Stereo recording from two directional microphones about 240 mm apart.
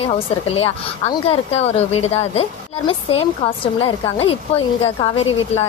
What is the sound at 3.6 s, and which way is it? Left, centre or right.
Speech, left.